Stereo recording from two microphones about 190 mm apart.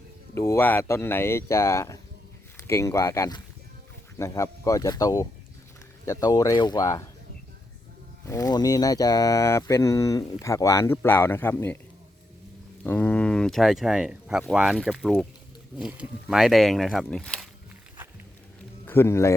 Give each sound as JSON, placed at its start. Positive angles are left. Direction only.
{"t": 0.3, "sound": "speech", "side_deg": 15}
{"t": 8.3, "sound": "speech", "side_deg": 20}
{"t": 12.8, "sound": "speech", "side_deg": 10}
{"t": 18.9, "sound": "a man's voice", "side_deg": 15}